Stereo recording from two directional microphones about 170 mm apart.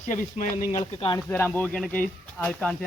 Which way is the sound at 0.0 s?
50° left (ahead or behind).